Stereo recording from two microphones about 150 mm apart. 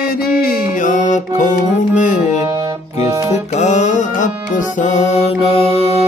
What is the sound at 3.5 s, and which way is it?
Music, 50° left (ahead or behind).